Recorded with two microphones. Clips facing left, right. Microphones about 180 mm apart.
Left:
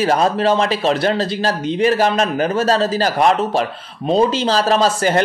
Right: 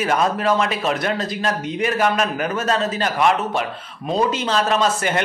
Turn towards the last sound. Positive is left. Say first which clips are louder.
# left 4 dB
turn(degrees=35)  # may be behind; listen again after turning